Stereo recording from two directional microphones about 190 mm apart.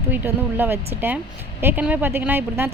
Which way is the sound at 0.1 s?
10° right (ahead or behind).